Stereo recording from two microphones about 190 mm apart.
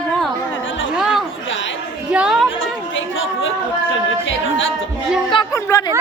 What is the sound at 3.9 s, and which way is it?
Speech, 80° left.